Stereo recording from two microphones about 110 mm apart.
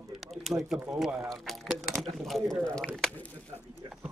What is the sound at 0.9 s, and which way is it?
Speech, 5° right (ahead or behind).